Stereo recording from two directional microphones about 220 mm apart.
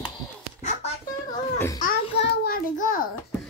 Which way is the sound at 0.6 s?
35° left (ahead or behind).